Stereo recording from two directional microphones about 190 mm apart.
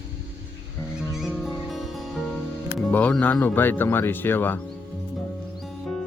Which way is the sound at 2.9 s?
5° left (ahead or behind).